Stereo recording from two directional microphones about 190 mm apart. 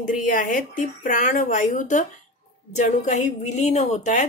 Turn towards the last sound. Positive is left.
turn(degrees=40)  # may be behind; listen again after turning